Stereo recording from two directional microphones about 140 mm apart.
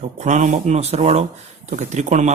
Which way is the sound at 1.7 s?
55° right (ahead or behind).